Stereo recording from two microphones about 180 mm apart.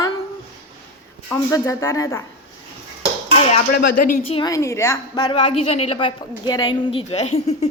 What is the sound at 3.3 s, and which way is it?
Dishes, 35° left (ahead or behind).